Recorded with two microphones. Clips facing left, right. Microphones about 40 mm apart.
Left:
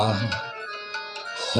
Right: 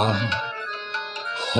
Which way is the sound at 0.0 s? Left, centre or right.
Right.